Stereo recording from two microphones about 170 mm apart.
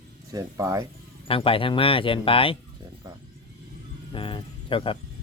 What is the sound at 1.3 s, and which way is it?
Speech, 30° left (ahead or behind).